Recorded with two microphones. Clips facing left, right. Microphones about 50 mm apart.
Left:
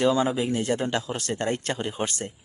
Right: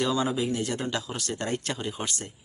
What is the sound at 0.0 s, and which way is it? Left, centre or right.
Speech, left.